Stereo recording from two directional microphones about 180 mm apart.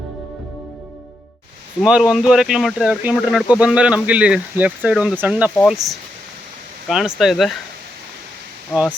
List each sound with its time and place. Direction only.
1.8 s speech: 5° right (ahead or behind)
8.7 s speech: 5° right (ahead or behind)